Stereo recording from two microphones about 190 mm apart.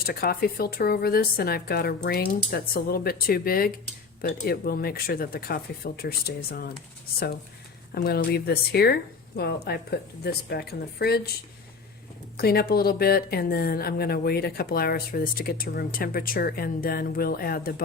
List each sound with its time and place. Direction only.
0.0 s speech: 50° left (ahead or behind)
7.9 s a woman's voice: 55° left (ahead or behind)
12.4 s speech: 55° left (ahead or behind)